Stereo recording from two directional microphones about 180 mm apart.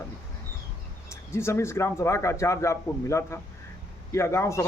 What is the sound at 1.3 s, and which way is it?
A man's voice, 15° left (ahead or behind).